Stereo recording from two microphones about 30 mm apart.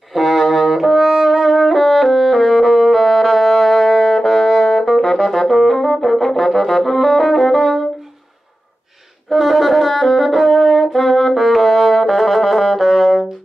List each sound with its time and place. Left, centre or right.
0.1 s brass instrument: centre
4.2 s music: centre
4.7 s brass instrument: centre
9.3 s brass instrument: centre